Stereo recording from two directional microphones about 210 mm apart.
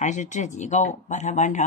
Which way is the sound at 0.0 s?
35° left (ahead or behind).